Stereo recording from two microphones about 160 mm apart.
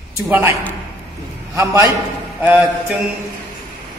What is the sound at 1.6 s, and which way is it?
A man's voice, 20° right (ahead or behind).